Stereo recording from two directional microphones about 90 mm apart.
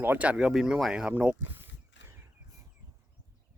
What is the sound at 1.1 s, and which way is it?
Speech, 20° right (ahead or behind).